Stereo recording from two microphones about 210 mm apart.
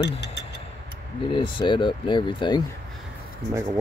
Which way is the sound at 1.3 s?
25° left (ahead or behind).